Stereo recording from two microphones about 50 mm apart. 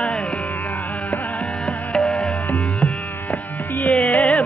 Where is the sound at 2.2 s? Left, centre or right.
Left.